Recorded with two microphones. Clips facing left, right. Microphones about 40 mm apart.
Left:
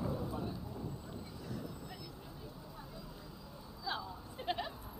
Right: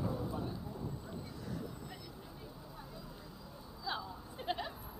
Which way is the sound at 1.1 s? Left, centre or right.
Centre.